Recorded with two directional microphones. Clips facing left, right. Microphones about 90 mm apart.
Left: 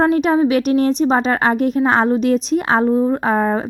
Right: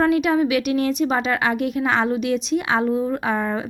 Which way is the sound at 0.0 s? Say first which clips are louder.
Left 4 dB; 35° left (ahead or behind).